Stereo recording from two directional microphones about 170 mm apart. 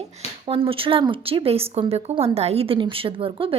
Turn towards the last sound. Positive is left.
turn(degrees=-30)  # may be behind; listen again after turning